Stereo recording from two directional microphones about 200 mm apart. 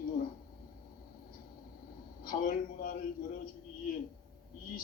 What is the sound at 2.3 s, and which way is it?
Speech, 45° left (ahead or behind).